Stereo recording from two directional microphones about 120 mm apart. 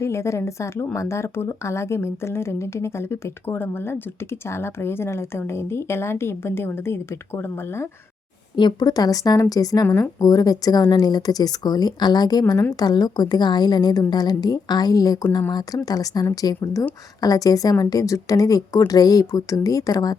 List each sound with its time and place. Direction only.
0.0 s speech: 25° left (ahead or behind)
8.5 s speech: 35° left (ahead or behind)
16.6 s speech: 15° left (ahead or behind)
17.2 s speech: 30° left (ahead or behind)